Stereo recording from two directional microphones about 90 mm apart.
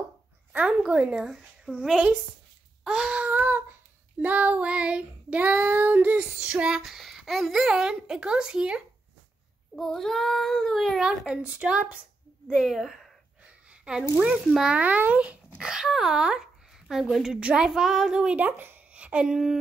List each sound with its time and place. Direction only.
0.5 s a woman's voice: 15° right (ahead or behind)
9.8 s a child's voice: 5° left (ahead or behind)
11.1 s a child's voice: 10° right (ahead or behind)
13.7 s a sound: 10° right (ahead or behind)
14.5 s a child's voice: 10° right (ahead or behind)
15.6 s a woman's voice: 5° right (ahead or behind)